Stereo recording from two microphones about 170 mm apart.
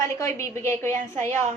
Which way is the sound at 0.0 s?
15° left (ahead or behind).